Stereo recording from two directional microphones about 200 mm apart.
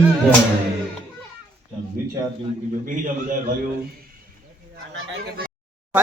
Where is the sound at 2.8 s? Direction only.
45° right (ahead or behind).